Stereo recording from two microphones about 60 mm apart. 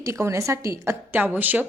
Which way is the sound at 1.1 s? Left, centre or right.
Right.